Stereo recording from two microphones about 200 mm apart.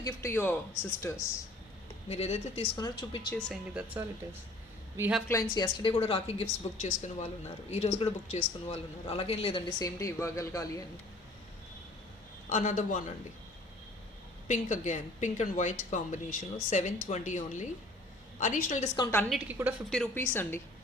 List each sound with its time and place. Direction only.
0.0 s speech: 15° left (ahead or behind)
2.0 s a woman's voice: 30° left (ahead or behind)
3.3 s a woman's voice: centre (ahead or behind)
5.3 s a man's voice: 20° left (ahead or behind)
12.5 s a woman's voice: 40° left (ahead or behind)
14.4 s a woman's voice: 35° left (ahead or behind)
19.3 s a woman's voice: 5° right (ahead or behind)
19.9 s speech: 5° left (ahead or behind)